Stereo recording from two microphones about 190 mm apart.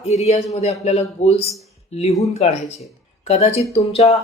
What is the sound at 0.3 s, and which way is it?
Speech, 35° left (ahead or behind).